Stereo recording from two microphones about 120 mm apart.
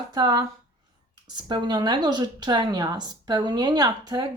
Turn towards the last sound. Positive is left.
turn(degrees=-35)  # may be behind; listen again after turning